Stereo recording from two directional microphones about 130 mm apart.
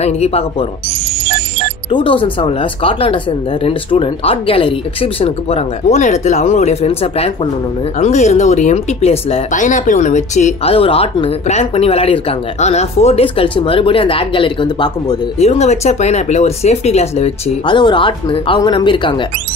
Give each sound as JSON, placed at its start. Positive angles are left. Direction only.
{"t": 0.0, "sound": "speech", "side_deg": 55}
{"t": 1.9, "sound": "speech", "side_deg": 40}
{"t": 8.0, "sound": "speech", "side_deg": 60}
{"t": 9.5, "sound": "speech", "side_deg": 75}
{"t": 15.3, "sound": "speech", "side_deg": 55}
{"t": 17.6, "sound": "speech", "side_deg": 35}